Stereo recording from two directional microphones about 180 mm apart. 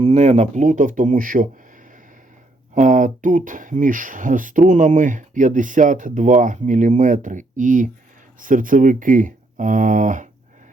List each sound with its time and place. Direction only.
0.0 s speech: 35° right (ahead or behind)
2.7 s speech: 45° right (ahead or behind)